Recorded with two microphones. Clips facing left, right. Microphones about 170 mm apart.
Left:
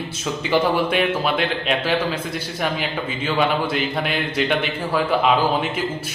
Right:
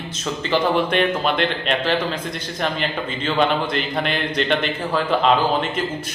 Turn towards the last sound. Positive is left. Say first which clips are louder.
# even
turn(degrees=10)  # may be behind; listen again after turning